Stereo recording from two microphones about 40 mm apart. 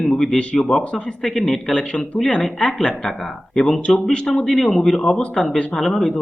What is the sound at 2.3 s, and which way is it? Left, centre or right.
Speech, centre.